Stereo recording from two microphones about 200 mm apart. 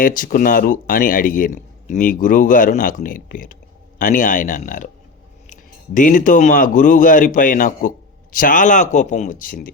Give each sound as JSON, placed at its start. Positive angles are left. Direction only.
{"t": 0.0, "sound": "speech", "side_deg": 45}